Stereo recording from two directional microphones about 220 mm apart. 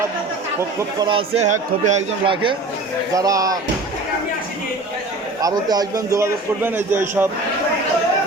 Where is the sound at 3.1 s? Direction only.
15° right (ahead or behind).